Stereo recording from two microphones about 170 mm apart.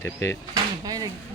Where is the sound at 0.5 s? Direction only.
20° right (ahead or behind).